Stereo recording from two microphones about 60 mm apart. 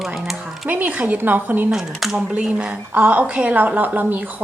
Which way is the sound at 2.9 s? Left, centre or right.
Right.